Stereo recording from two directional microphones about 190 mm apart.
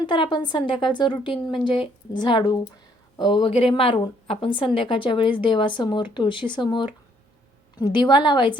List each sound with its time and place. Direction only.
0.0 s a woman's voice: 25° left (ahead or behind)